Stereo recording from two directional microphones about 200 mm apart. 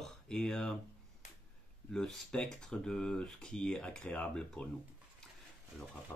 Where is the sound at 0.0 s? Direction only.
5° left (ahead or behind).